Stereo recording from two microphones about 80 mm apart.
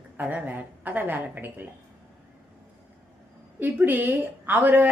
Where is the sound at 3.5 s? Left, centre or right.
Right.